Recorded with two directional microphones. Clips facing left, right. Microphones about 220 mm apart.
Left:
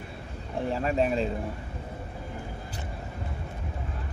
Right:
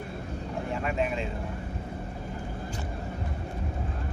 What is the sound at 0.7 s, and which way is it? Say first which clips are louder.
Speech: left 4 dB; 35° left (ahead or behind).